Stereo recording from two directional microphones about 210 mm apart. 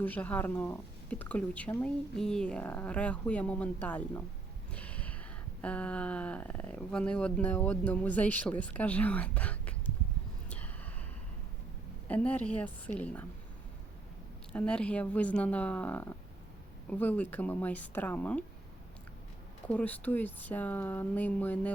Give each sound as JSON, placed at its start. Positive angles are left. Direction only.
{"t": 0.0, "sound": "speech", "side_deg": 5}
{"t": 4.7, "sound": "a sound", "side_deg": 5}
{"t": 5.6, "sound": "speech", "side_deg": 5}
{"t": 12.0, "sound": "speech", "side_deg": 5}
{"t": 14.5, "sound": "speech", "side_deg": 5}
{"t": 19.6, "sound": "speech", "side_deg": 5}